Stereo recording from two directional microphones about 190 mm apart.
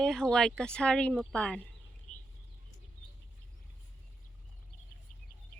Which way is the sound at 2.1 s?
40° left (ahead or behind).